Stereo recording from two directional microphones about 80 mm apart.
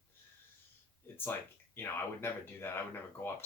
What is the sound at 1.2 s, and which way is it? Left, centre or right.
Speech, left.